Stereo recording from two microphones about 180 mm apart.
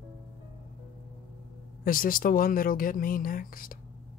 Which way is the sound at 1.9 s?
50° left (ahead or behind).